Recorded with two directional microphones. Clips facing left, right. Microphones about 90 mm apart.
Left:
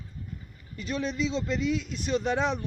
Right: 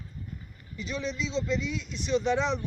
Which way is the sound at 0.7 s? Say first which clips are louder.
Left 3 dB; 45° left (ahead or behind).